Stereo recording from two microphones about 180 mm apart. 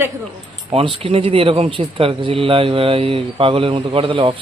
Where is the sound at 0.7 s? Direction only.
30° right (ahead or behind).